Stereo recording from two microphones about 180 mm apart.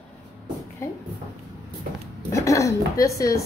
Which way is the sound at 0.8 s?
15° left (ahead or behind).